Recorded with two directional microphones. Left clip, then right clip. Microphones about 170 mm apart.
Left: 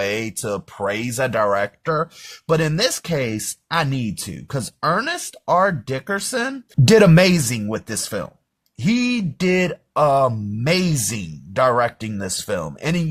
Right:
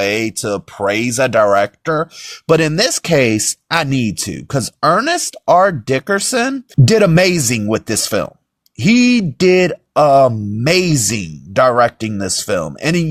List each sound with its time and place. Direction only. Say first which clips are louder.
0.0 s speech: right 6 dB; 30° right (ahead or behind)